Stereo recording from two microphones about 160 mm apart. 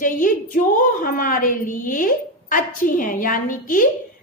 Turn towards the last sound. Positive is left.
turn(degrees=60)  # may be behind; listen again after turning